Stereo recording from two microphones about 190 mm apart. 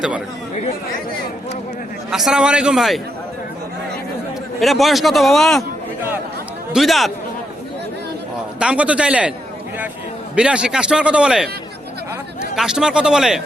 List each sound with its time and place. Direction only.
2.0 s a man's voice: 5° right (ahead or behind)
4.6 s a man's voice: centre (ahead or behind)
6.7 s a man's voice: centre (ahead or behind)
8.5 s a man's voice: 5° right (ahead or behind)
10.3 s a man's voice: 5° right (ahead or behind)
12.5 s a man's voice: 5° right (ahead or behind)